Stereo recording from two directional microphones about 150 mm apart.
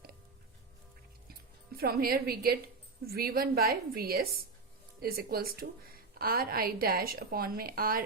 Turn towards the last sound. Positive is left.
turn(degrees=-80)